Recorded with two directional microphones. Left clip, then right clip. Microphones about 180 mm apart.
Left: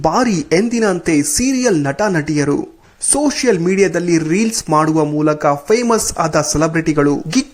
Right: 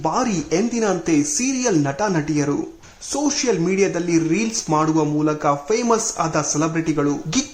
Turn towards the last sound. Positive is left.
turn(degrees=35)  # may be behind; listen again after turning